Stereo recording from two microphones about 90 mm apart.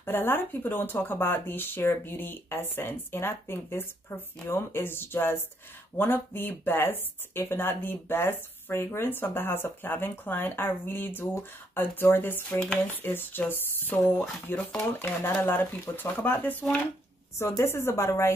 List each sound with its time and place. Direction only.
0.0 s speech: 25° left (ahead or behind)
12.5 s speech: 15° left (ahead or behind)
13.0 s speech: 25° left (ahead or behind)
17.4 s speech: 35° left (ahead or behind)